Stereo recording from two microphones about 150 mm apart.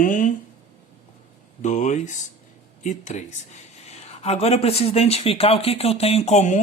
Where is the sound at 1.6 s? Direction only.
55° left (ahead or behind).